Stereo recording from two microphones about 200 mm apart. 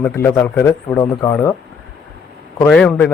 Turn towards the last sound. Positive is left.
turn(degrees=5)  # may be behind; listen again after turning